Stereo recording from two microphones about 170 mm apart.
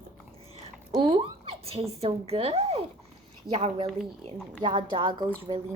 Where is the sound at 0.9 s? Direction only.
30° right (ahead or behind).